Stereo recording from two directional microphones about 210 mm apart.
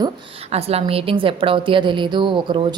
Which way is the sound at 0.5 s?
30° right (ahead or behind).